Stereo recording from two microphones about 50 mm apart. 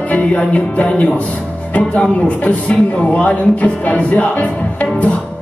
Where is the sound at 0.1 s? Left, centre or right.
Left.